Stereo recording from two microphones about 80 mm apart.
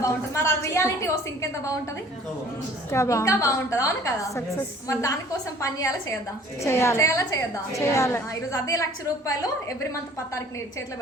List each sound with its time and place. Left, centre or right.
0.0 s a woman's voice: left
2.9 s a woman's voice: left